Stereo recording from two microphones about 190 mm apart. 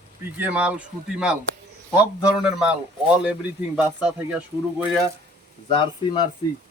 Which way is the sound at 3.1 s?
5° right (ahead or behind).